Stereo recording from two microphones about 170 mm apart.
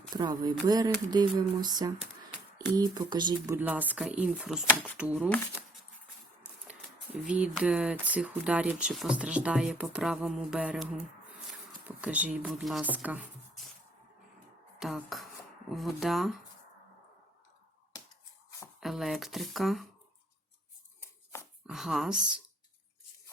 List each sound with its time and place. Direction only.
0.1 s speech: 25° right (ahead or behind)
3.5 s speech: 10° right (ahead or behind)
6.7 s speech: 5° right (ahead or behind)
14.8 s speech: centre (ahead or behind)
18.8 s speech: centre (ahead or behind)
21.7 s speech: centre (ahead or behind)